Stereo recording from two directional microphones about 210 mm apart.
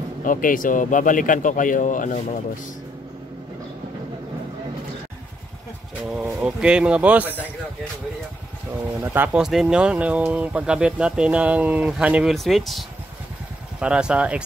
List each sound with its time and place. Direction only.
0.2 s a man's voice: 40° left (ahead or behind)
6.0 s speech: 5° right (ahead or behind)
9.0 s speech: 10° right (ahead or behind)